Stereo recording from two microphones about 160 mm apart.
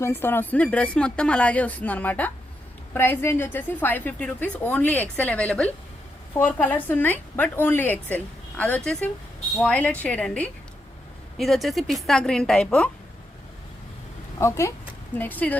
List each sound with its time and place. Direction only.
0.0 s a woman's voice: 15° left (ahead or behind)
14.3 s a woman's voice: 20° left (ahead or behind)